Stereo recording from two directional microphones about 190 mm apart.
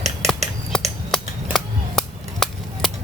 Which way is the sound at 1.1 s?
Centre (ahead or behind).